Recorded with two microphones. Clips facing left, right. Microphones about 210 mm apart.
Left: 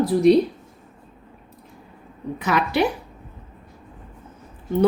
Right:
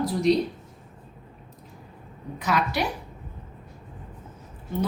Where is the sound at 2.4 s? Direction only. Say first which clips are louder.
Left 5 dB; 60° left (ahead or behind).